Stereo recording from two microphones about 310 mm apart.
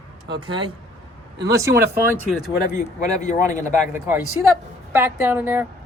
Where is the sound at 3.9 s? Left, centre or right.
Centre.